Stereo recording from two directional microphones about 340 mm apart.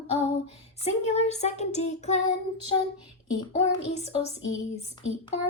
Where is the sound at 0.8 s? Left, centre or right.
Centre.